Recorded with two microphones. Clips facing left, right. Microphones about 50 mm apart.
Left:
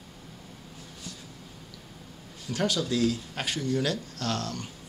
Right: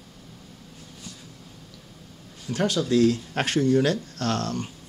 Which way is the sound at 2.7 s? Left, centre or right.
Right.